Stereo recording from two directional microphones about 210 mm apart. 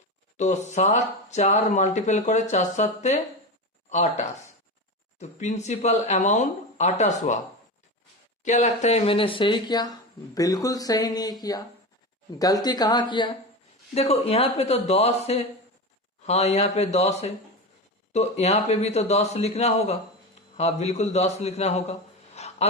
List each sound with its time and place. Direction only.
0.3 s speech: 35° left (ahead or behind)
8.4 s speech: 35° left (ahead or behind)
22.4 s a sound: 30° left (ahead or behind)